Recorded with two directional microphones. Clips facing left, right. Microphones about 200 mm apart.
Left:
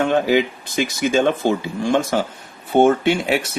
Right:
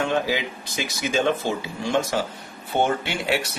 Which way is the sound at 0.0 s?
55° left (ahead or behind).